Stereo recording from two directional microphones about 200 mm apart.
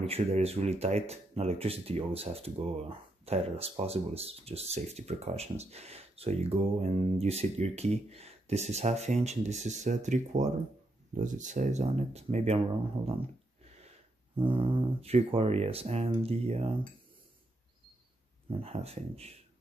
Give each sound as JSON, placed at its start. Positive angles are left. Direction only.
{"t": 0.0, "sound": "speech", "side_deg": -30}
{"t": 18.5, "sound": "speech", "side_deg": -30}